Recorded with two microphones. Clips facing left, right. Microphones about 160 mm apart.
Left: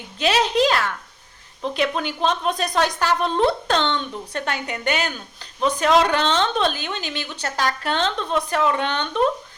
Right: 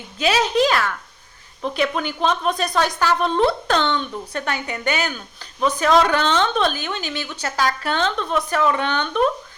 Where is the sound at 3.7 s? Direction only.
30° left (ahead or behind).